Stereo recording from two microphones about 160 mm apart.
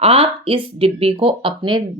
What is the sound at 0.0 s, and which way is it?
Speech, 35° right (ahead or behind).